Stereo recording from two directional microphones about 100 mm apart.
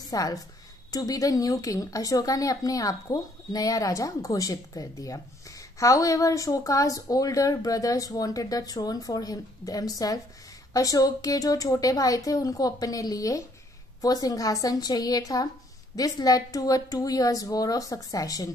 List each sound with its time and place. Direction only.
0.1 s a woman's voice: 35° left (ahead or behind)